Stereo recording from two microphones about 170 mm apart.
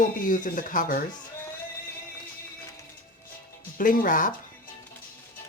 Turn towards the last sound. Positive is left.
turn(degrees=50)  # may be behind; listen again after turning